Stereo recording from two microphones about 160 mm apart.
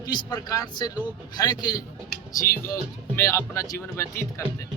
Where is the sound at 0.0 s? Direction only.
25° left (ahead or behind).